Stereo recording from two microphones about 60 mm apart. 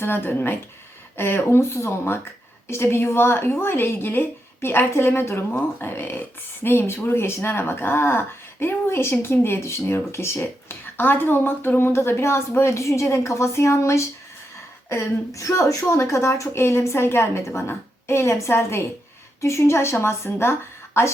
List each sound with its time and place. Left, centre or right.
0.0 s a woman's voice: left
9.6 s speech: left
15.3 s speech: left